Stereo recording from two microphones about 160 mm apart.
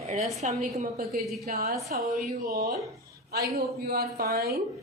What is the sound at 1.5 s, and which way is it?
Speech, 75° right (ahead or behind).